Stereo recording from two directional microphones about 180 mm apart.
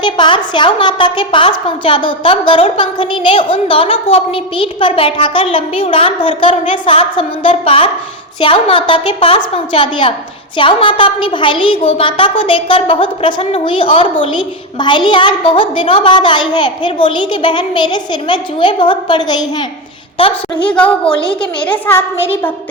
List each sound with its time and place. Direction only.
0.0 s a child's voice: 25° left (ahead or behind)
20.7 s a woman's voice: 5° left (ahead or behind)